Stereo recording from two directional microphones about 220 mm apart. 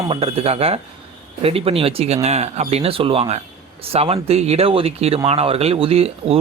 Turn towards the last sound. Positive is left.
turn(degrees=-25)  # may be behind; listen again after turning